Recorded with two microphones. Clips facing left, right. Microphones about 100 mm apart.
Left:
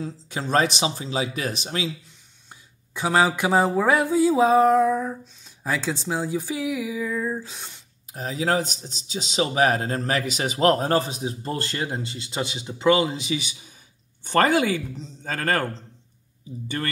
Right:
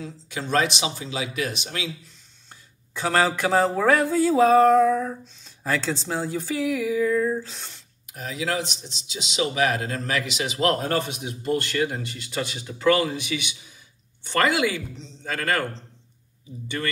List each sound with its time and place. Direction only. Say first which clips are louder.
0.0 s speech: left 3 dB; 35° left (ahead or behind)
2.5 s speech: even; 15° left (ahead or behind)
8.1 s speech: left 4 dB; 35° left (ahead or behind)
14.2 s speech: left 2 dB; 45° left (ahead or behind)
16.6 s speech: even; 40° left (ahead or behind)